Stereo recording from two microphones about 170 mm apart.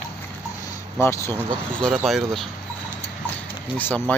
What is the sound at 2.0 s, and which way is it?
Speech, centre (ahead or behind).